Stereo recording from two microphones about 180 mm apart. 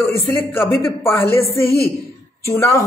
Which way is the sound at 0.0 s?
10° left (ahead or behind).